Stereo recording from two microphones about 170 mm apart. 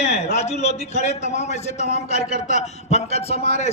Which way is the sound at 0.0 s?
40° left (ahead or behind).